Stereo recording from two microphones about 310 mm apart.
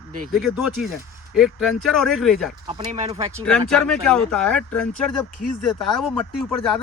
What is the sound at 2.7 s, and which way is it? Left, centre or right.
Speech, centre.